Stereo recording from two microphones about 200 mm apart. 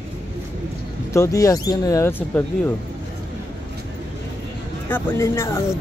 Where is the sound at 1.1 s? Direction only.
15° left (ahead or behind).